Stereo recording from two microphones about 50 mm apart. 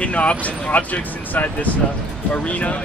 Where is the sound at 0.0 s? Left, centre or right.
Left.